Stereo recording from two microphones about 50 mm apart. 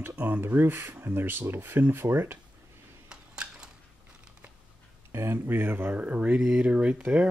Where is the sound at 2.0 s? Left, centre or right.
Right.